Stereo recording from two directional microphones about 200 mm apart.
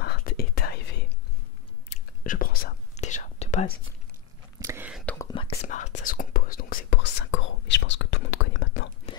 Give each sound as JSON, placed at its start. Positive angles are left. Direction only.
{"t": 0.0, "sound": "whispering", "side_deg": 50}
{"t": 2.2, "sound": "whispering", "side_deg": 45}
{"t": 4.6, "sound": "whispering", "side_deg": -10}
{"t": 5.3, "sound": "whispering", "side_deg": 30}